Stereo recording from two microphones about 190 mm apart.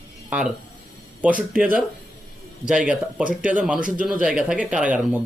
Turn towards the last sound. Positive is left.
turn(degrees=-5)  # may be behind; listen again after turning